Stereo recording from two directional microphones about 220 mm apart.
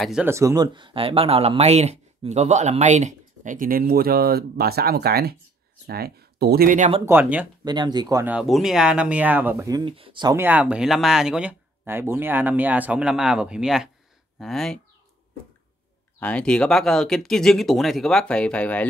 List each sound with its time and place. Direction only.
0.0 s speech: 5° right (ahead or behind); by 6.9 s 40° right (ahead or behind)
7.1 s speech: 10° right (ahead or behind)
7.6 s speech: 20° right (ahead or behind)
8.4 s speech: centre (ahead or behind)
16.2 s speech: 5° left (ahead or behind)